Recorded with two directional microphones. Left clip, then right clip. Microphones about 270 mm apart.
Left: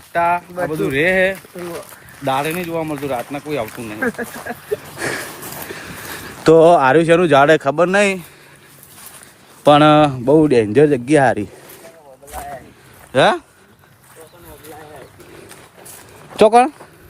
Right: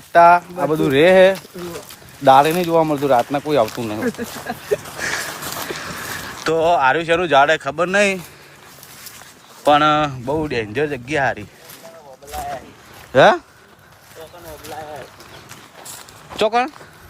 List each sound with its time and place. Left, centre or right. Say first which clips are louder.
0.1 s speech: right 7 dB; right
4.2 s speech: left 3 dB; centre
4.9 s dog: even; centre
6.4 s speech: left 6 dB; centre
9.6 s speech: left 4 dB; centre
13.1 s speech: right 2 dB; centre
16.4 s speech: left 7 dB; centre